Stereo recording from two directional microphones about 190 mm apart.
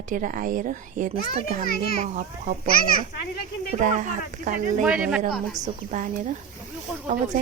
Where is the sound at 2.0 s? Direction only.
40° right (ahead or behind).